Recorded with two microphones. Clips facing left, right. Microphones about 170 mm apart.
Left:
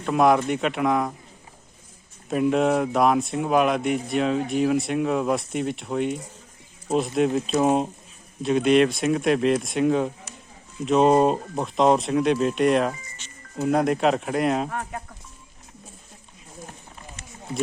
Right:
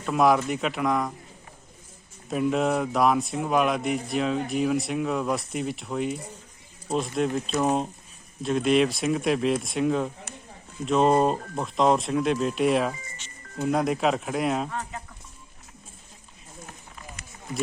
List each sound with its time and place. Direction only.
0.0 s speech: centre (ahead or behind)
2.3 s speech: centre (ahead or behind)
7.3 s speech: 5° left (ahead or behind)
14.7 s speech: 55° left (ahead or behind)